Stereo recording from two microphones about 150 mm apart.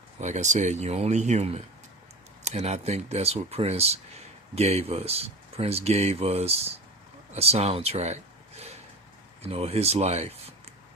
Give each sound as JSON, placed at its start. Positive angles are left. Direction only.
{"t": 0.2, "sound": "speech", "side_deg": -50}